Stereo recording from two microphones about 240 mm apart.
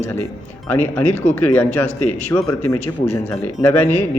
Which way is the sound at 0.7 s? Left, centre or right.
Centre.